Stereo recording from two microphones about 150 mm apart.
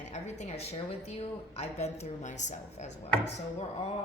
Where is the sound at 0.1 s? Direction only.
50° left (ahead or behind).